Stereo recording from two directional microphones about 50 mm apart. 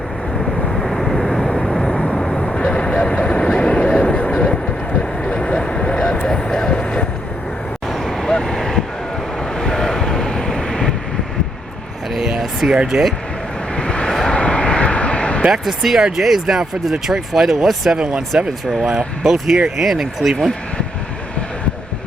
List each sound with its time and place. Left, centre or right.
0.7 s vehicle: centre
2.0 s vehicle: centre
7.9 s vehicle: centre
12.1 s a sound: centre
12.7 s speech: centre
13.7 s vehicle: centre
14.1 s vehicle: centre
14.3 s vehicle: left
15.6 s speech: centre
17.9 s speech: centre
18.7 s speech: centre